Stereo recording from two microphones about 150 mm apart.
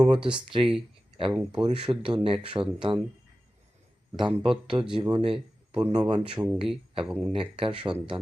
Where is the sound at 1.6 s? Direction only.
35° right (ahead or behind).